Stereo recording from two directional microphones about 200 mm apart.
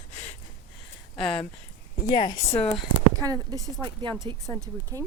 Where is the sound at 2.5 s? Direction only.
5° left (ahead or behind).